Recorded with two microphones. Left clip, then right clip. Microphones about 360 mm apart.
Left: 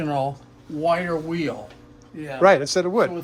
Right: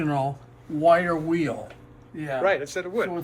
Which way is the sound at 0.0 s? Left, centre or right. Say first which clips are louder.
Left 2 dB; centre.